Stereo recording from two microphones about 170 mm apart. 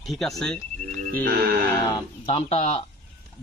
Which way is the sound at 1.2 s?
65° right (ahead or behind).